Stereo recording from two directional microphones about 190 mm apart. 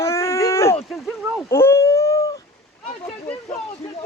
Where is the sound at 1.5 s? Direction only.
15° left (ahead or behind).